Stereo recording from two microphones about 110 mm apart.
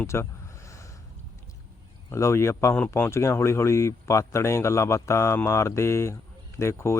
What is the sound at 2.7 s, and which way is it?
Speech, 15° left (ahead or behind).